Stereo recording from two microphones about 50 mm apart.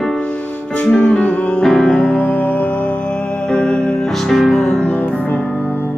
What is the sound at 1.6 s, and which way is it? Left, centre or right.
Music, centre.